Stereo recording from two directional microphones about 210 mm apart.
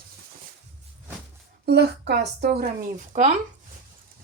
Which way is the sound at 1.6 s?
50° right (ahead or behind).